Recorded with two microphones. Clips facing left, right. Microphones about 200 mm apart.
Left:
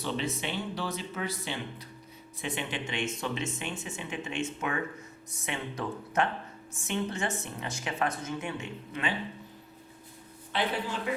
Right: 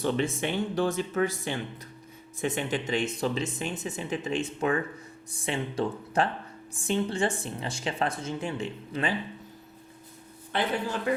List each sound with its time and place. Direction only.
0.0 s speech: 50° right (ahead or behind)
10.5 s speech: 50° right (ahead or behind)